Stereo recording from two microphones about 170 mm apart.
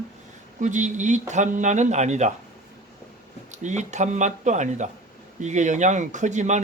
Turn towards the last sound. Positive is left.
turn(degrees=-45)  # may be behind; listen again after turning